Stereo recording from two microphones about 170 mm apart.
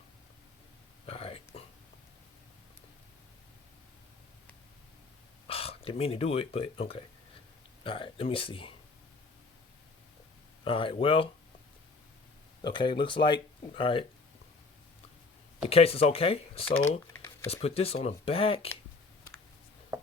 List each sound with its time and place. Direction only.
1.0 s a sound: 35° left (ahead or behind)
5.5 s speech: 35° left (ahead or behind)
10.6 s speech: 30° left (ahead or behind)
12.6 s speech: 30° left (ahead or behind)
15.7 s speech: 35° left (ahead or behind)
17.1 s a sound: 15° left (ahead or behind)
17.5 s speech: 35° left (ahead or behind)